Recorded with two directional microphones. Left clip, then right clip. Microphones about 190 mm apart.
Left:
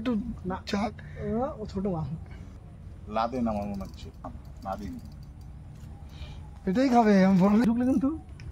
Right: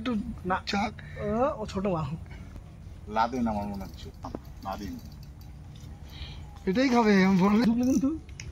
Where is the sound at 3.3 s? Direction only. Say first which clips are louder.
Even; 30° left (ahead or behind).